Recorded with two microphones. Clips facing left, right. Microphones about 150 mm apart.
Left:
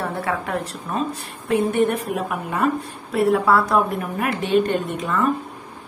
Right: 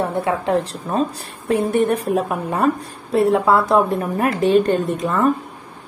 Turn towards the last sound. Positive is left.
turn(degrees=-35)  # may be behind; listen again after turning